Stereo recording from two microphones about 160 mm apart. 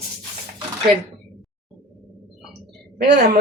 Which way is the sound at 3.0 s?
85° right.